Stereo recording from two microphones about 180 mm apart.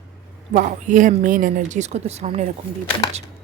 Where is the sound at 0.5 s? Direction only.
45° right (ahead or behind).